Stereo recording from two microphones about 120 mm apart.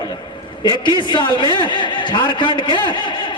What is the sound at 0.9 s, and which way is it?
A man's voice, 40° left (ahead or behind).